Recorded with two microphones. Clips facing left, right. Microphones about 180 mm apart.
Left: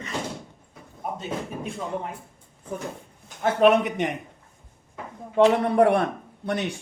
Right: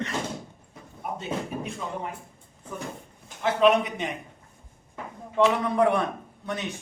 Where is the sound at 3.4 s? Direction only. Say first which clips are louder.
Left 2 dB; 55° left (ahead or behind).